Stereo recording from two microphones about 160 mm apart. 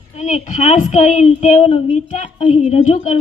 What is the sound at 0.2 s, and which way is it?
A woman's voice, 50° left (ahead or behind).